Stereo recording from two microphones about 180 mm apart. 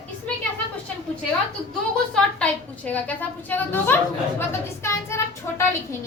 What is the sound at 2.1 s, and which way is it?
A woman's voice, 5° left (ahead or behind).